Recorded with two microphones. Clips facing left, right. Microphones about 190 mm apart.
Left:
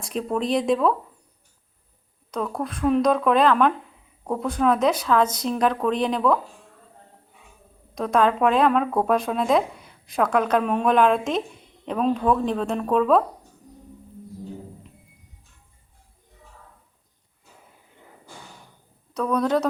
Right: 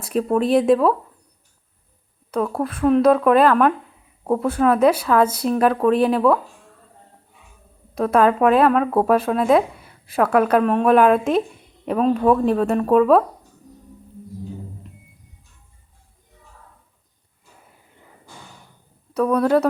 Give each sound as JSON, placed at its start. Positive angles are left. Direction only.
{"t": 0.0, "sound": "speech", "side_deg": -5}
{"t": 2.3, "sound": "speech", "side_deg": -5}
{"t": 7.9, "sound": "speech", "side_deg": -5}
{"t": 19.1, "sound": "speech", "side_deg": -5}